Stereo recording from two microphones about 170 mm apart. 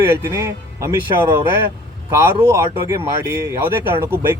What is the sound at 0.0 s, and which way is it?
Speech, 15° right (ahead or behind).